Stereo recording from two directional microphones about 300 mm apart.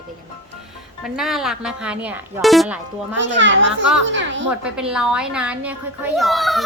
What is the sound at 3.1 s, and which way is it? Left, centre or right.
A child's voice, right.